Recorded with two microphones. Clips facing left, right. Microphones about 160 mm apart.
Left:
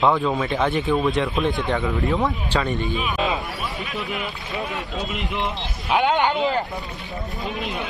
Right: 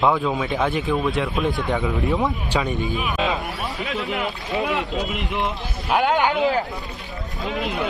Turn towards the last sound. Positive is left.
turn(degrees=-5)  # may be behind; listen again after turning